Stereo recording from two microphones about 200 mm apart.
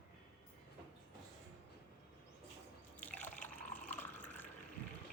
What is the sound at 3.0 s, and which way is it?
Liquid, 10° left (ahead or behind).